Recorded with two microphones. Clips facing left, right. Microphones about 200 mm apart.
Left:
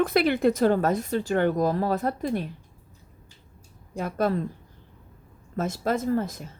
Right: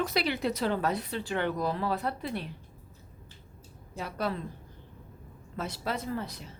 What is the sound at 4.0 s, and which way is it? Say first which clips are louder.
Speech: left 8 dB; 50° left (ahead or behind).